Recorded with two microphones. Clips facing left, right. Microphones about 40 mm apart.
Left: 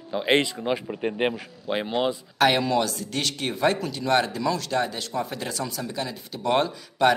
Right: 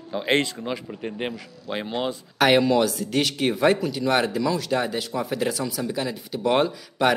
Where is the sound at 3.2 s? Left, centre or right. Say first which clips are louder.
Right 3 dB; centre.